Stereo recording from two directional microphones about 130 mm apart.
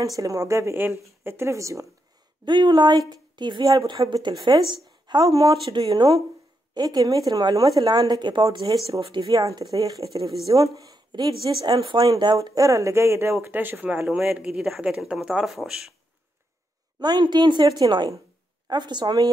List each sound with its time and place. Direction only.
0.0 s speech: 30° right (ahead or behind)
2.4 s a woman's voice: 35° right (ahead or behind); by 15.9 s 5° right (ahead or behind)
17.0 s a woman's voice: 35° right (ahead or behind)